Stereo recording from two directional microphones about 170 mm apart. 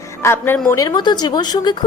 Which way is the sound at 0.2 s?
15° left (ahead or behind).